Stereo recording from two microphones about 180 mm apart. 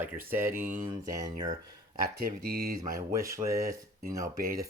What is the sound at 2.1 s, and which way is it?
Dishes, 60° right (ahead or behind).